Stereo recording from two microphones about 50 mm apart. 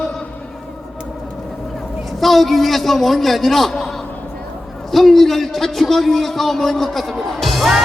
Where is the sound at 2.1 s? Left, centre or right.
Centre.